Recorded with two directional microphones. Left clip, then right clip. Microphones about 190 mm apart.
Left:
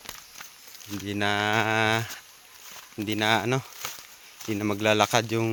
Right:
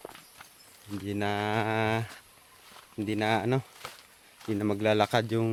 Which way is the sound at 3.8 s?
55° left (ahead or behind).